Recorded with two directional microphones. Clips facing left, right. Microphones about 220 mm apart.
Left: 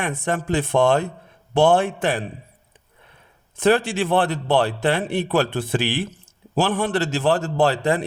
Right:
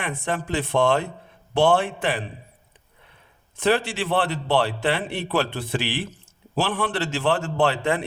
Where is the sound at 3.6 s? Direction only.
45° left (ahead or behind).